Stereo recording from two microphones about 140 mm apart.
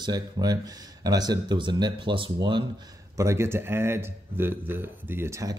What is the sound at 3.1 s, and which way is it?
Speech, 20° right (ahead or behind).